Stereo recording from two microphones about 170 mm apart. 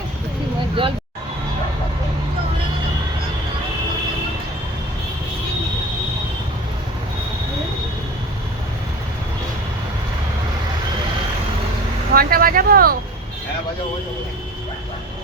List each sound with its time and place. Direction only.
12.1 s vehicle: 60° right (ahead or behind)